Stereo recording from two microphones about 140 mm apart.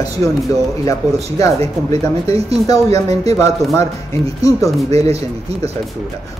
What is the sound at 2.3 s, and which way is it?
Speech, 45° right (ahead or behind).